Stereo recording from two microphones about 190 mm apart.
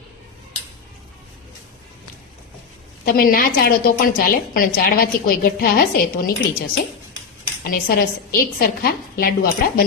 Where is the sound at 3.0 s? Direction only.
50° left (ahead or behind).